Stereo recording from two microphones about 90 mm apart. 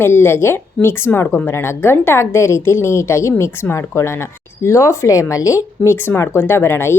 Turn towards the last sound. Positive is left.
turn(degrees=30)  # may be behind; listen again after turning